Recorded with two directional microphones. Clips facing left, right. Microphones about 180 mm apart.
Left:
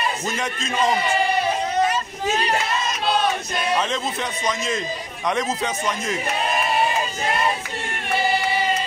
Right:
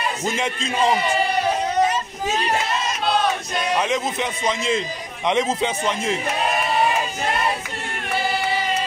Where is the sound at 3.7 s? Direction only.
15° right (ahead or behind).